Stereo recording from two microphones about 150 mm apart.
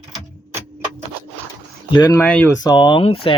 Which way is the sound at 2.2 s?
10° left (ahead or behind).